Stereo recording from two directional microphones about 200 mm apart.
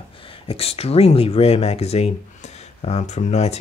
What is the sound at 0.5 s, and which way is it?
Speech, 30° left (ahead or behind).